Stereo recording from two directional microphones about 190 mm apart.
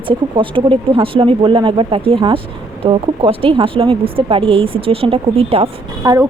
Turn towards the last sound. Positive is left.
turn(degrees=-20)  # may be behind; listen again after turning